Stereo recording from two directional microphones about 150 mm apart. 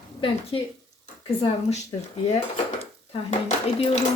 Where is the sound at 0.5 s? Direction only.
35° left (ahead or behind).